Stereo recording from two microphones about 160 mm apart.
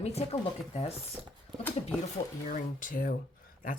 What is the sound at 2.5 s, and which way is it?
Speech, 55° left (ahead or behind).